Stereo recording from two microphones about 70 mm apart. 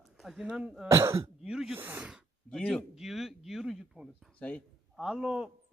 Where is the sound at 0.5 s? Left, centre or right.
Centre.